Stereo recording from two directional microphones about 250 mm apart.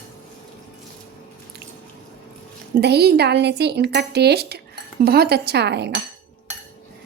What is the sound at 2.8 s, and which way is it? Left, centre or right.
A woman's voice, right.